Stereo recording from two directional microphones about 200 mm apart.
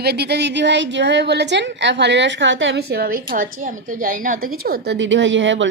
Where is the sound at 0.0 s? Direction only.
55° right (ahead or behind).